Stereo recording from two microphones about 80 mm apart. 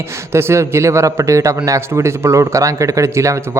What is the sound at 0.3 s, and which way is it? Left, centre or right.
Speech, right.